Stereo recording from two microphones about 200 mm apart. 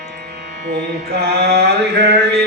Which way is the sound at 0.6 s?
55° right (ahead or behind).